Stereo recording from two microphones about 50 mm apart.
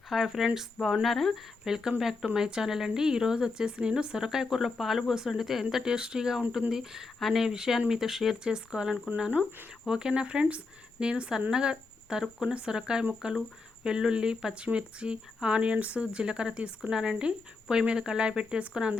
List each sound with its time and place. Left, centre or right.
0.1 s speech: centre; by 18.9 s right